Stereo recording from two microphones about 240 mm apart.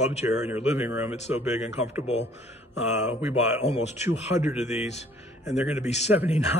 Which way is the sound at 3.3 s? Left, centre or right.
Left.